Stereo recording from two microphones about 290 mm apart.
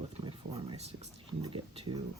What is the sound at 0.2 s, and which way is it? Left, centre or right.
Speech, centre.